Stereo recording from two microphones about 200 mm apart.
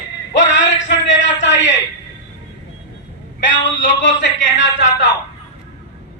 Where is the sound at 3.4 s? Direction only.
65° left (ahead or behind).